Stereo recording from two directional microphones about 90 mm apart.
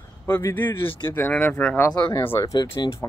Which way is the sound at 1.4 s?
20° left (ahead or behind).